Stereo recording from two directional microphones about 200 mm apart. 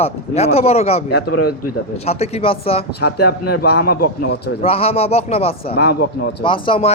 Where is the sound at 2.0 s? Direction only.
30° left (ahead or behind).